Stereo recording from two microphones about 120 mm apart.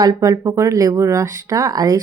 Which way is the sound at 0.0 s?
30° right (ahead or behind).